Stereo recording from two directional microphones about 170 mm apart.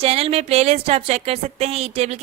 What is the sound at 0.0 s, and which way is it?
A woman's voice, 35° right (ahead or behind).